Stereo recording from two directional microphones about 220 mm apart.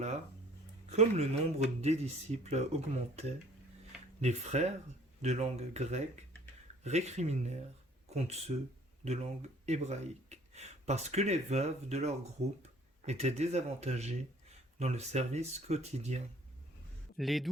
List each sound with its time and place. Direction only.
0.9 s speech: 30° right (ahead or behind)
17.2 s speech: centre (ahead or behind)